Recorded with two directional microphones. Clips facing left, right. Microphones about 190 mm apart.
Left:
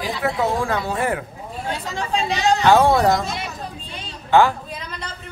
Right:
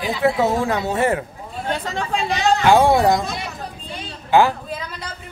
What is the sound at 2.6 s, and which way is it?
Speech, 15° right (ahead or behind).